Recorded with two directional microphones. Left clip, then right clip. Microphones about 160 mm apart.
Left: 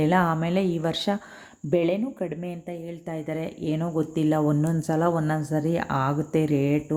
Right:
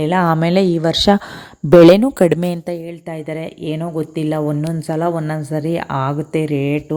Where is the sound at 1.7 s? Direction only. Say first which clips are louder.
Right 17 dB; 90° right.